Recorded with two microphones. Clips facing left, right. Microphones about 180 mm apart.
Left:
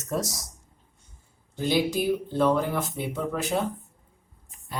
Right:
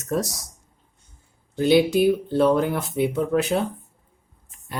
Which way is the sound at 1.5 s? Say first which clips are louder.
Right 7 dB; 65° right (ahead or behind).